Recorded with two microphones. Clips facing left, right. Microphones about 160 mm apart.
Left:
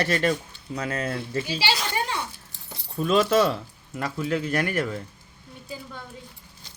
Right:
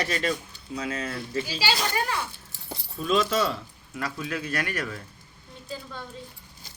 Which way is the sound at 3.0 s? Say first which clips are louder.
Left 4 dB; 50° left (ahead or behind).